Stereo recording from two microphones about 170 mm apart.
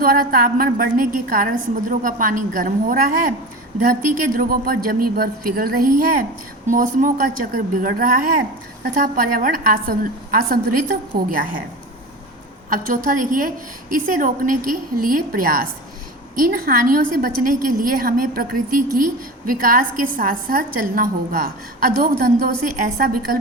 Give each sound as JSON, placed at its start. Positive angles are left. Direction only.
{"t": 0.0, "sound": "a woman's voice", "side_deg": -60}
{"t": 12.7, "sound": "a woman's voice", "side_deg": -50}